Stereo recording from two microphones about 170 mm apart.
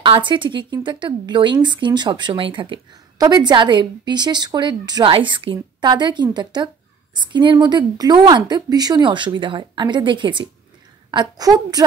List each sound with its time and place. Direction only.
0.0 s a woman's voice: 30° right (ahead or behind)